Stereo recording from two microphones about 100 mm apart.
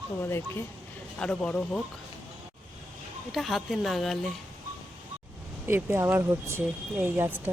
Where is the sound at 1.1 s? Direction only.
10° left (ahead or behind).